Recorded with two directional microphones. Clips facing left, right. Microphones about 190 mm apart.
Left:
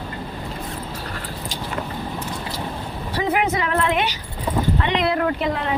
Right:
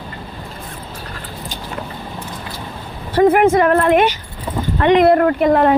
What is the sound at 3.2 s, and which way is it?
Speech, 50° right (ahead or behind).